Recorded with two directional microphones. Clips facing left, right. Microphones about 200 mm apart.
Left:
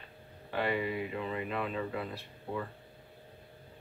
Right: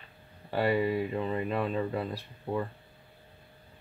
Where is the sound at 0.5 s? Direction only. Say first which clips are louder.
Right 5 dB; 40° right (ahead or behind).